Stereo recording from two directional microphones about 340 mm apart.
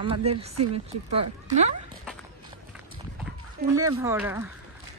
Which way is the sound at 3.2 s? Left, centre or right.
Centre.